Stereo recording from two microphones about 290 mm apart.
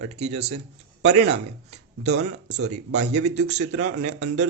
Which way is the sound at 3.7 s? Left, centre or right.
Right.